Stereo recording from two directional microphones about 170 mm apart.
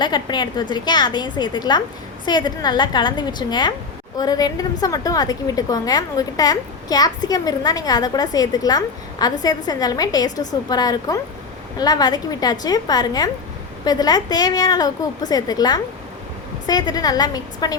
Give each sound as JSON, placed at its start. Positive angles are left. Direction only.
{"t": 0.0, "sound": "a woman's voice", "side_deg": 25}